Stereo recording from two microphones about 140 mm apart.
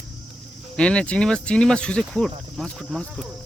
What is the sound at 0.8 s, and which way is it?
Speech, 5° left (ahead or behind).